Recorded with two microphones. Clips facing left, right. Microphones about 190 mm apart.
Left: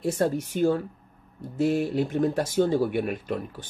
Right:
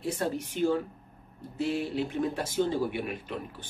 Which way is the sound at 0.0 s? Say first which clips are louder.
Left 6 dB; 45° left (ahead or behind).